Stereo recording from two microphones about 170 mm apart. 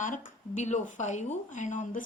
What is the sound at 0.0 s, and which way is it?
A woman's voice, 50° left (ahead or behind).